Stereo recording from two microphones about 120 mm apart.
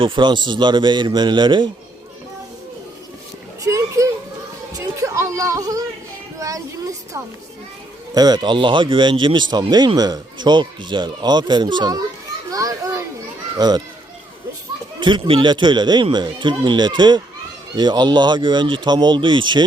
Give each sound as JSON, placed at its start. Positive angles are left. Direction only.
{"t": 0.0, "sound": "speech", "side_deg": -40}
{"t": 3.6, "sound": "children playing", "side_deg": -25}
{"t": 4.7, "sound": "speech", "side_deg": -25}
{"t": 8.1, "sound": "speech", "side_deg": -35}
{"t": 12.5, "sound": "children playing", "side_deg": -30}
{"t": 13.6, "sound": "speech", "side_deg": -35}
{"t": 15.0, "sound": "speech", "side_deg": -40}